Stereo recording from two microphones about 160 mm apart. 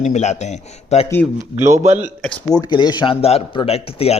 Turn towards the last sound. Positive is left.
turn(degrees=40)  # may be behind; listen again after turning